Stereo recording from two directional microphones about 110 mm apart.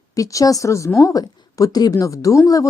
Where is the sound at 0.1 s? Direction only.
30° left (ahead or behind).